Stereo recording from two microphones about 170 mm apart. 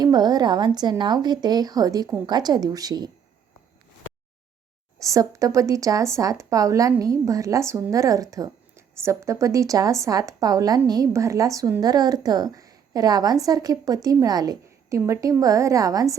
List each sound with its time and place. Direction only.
0.0 s speech: 25° right (ahead or behind)
4.9 s speech: 20° right (ahead or behind)